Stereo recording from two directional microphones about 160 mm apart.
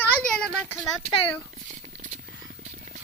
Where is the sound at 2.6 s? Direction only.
50° right (ahead or behind).